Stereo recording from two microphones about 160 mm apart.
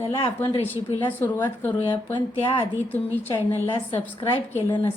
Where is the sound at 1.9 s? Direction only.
30° left (ahead or behind).